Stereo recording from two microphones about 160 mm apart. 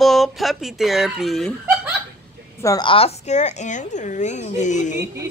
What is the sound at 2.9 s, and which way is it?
A woman's voice, 40° left (ahead or behind).